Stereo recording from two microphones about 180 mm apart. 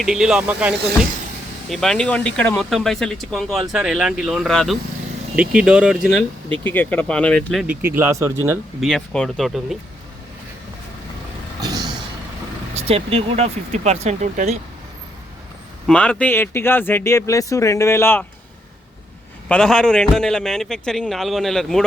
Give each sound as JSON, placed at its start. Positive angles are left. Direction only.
{"t": 0.0, "sound": "a man's voice", "side_deg": -5}
{"t": 6.7, "sound": "speech", "side_deg": 10}
{"t": 8.8, "sound": "a man's voice", "side_deg": 0}
{"t": 11.6, "sound": "vehicle", "side_deg": -20}
{"t": 12.7, "sound": "speech", "side_deg": -35}
{"t": 15.9, "sound": "speech", "side_deg": 5}
{"t": 19.5, "sound": "a man's voice", "side_deg": 5}